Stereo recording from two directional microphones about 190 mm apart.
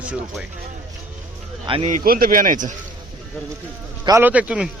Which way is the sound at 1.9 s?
50° right (ahead or behind).